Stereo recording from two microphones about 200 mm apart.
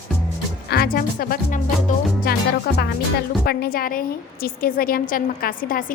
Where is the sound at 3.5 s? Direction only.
50° left (ahead or behind).